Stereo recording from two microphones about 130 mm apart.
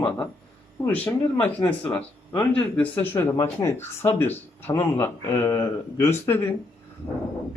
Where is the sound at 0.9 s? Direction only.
10° left (ahead or behind).